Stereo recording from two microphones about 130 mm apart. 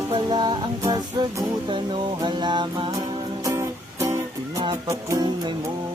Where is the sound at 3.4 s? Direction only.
25° right (ahead or behind).